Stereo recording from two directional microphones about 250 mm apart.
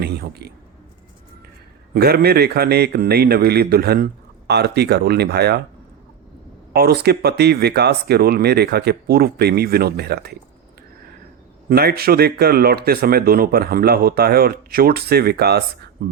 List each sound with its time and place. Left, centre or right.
0.0 s a man's voice: right
1.9 s speech: right
6.7 s speech: right
11.7 s speech: right